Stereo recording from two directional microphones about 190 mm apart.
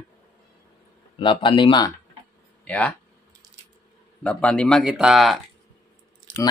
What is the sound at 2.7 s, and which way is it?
Speech, 5° left (ahead or behind).